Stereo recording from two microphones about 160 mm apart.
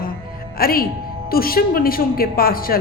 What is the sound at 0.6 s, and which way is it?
A woman's voice, 65° left (ahead or behind).